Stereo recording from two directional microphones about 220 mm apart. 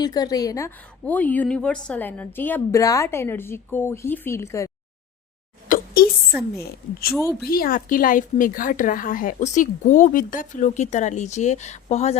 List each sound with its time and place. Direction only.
0.0 s a woman's voice: 20° left (ahead or behind)
5.6 s a sound: 40° left (ahead or behind)
7.4 s speech: 40° left (ahead or behind)